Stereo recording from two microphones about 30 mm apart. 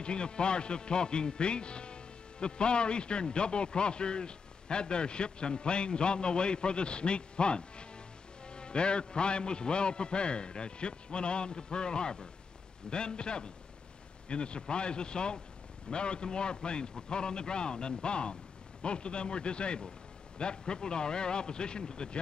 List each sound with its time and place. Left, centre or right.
0.0 s a man's voice: left